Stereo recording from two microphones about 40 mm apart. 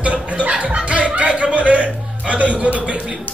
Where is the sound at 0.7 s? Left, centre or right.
Right.